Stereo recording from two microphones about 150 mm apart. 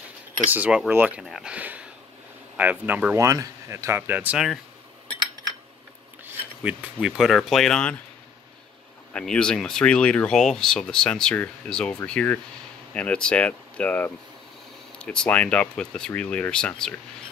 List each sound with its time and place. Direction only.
0.5 s speech: 10° right (ahead or behind)
3.2 s speech: 20° right (ahead or behind)
6.6 s speech: 5° right (ahead or behind)
9.1 s speech: 5° left (ahead or behind)